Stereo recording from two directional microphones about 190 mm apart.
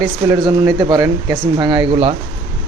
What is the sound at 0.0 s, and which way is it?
Speech, 15° right (ahead or behind).